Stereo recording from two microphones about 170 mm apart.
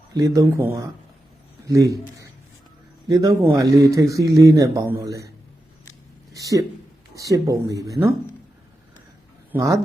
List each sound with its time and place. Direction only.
0.1 s a man's voice: 20° right (ahead or behind)
6.3 s speech: 20° right (ahead or behind)
9.5 s speech: 15° right (ahead or behind)